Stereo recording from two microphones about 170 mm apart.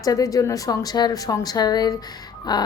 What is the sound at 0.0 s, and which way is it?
A woman's voice, 20° left (ahead or behind).